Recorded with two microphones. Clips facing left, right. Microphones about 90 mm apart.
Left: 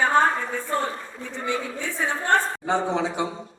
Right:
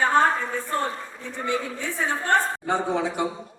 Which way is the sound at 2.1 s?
20° left (ahead or behind).